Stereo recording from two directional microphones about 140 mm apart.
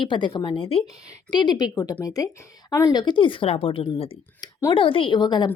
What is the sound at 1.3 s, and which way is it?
Speech, 30° left (ahead or behind).